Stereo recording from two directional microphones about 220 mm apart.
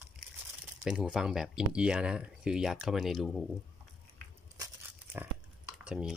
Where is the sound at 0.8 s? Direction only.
5° right (ahead or behind).